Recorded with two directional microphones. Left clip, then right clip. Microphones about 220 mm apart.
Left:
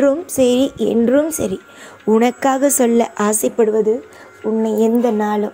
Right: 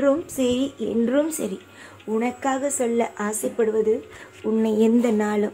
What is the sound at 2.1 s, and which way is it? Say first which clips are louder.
Speech: left 10 dB; 40° left (ahead or behind).